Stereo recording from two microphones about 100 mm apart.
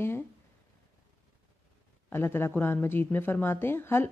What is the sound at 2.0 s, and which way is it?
Speech, 25° left (ahead or behind).